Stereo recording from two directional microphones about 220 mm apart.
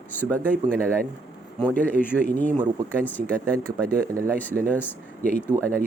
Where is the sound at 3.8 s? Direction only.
15° right (ahead or behind).